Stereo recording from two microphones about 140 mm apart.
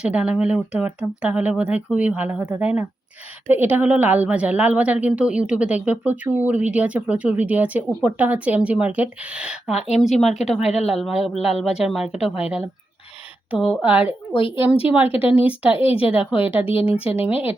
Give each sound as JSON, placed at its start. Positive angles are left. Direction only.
{"t": 0.0, "sound": "a woman's voice", "side_deg": -10}
{"t": 13.5, "sound": "a woman's voice", "side_deg": -5}
{"t": 14.3, "sound": "speech", "side_deg": 40}
{"t": 14.8, "sound": "a woman's voice", "side_deg": -10}
{"t": 16.6, "sound": "speech", "side_deg": 40}
{"t": 17.2, "sound": "a woman's voice", "side_deg": -10}